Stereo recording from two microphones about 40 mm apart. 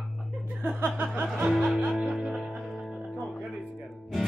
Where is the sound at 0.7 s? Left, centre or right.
Right.